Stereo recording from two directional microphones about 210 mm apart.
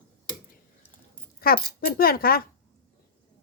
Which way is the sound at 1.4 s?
45° left (ahead or behind).